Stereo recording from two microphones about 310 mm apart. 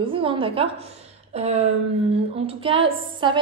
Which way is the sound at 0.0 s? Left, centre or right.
Centre.